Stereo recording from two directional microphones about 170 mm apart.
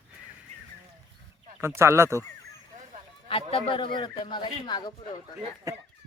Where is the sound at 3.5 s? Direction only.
30° left (ahead or behind).